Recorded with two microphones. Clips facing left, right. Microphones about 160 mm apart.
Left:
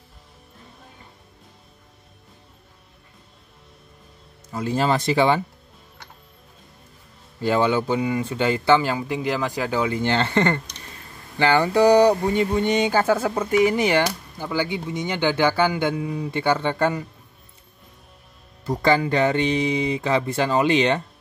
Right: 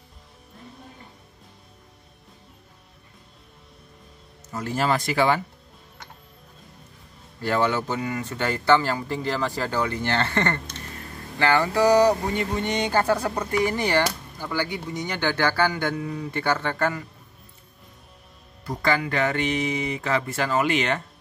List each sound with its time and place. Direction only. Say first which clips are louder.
4.5 s speech: left 3 dB; 15° left (ahead or behind)
7.3 s speech: left 3 dB; 15° left (ahead or behind)
12.9 s speech: left 2 dB; 5° left (ahead or behind)
13.5 s speech: left 5 dB; 20° left (ahead or behind)
18.7 s speech: left 5 dB; 25° left (ahead or behind)